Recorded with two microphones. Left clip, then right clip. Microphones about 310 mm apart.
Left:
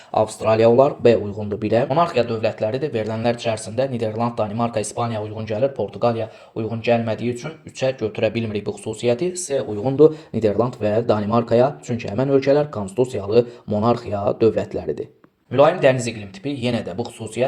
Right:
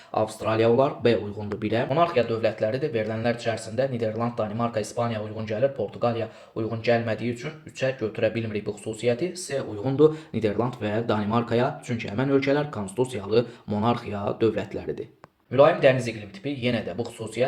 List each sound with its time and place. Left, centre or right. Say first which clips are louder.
0.1 s speech: left 7 dB; centre
1.9 s speech: left 4 dB; left
9.8 s speech: left 5 dB; centre
15.5 s speech: left 3 dB; left